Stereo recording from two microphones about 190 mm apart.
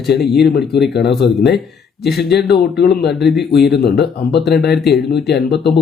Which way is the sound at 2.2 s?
60° left (ahead or behind).